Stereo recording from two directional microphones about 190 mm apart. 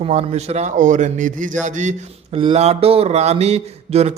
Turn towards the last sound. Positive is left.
turn(degrees=-35)  # may be behind; listen again after turning